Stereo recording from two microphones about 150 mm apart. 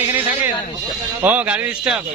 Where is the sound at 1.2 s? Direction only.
10° right (ahead or behind).